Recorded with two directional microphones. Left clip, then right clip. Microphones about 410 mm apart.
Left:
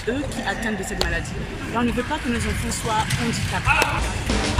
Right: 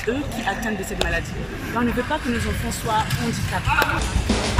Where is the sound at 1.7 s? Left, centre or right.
Centre.